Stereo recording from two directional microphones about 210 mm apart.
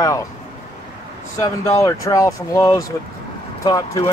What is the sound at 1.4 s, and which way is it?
Speech, 15° left (ahead or behind).